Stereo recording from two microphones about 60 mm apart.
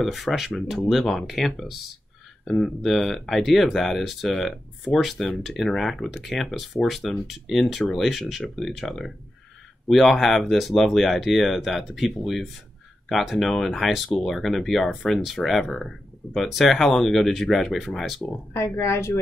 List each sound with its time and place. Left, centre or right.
0.0 s speech: centre
18.5 s speech: left